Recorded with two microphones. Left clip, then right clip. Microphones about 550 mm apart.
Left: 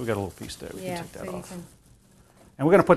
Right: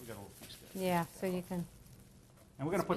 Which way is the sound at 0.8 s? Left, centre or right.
Right.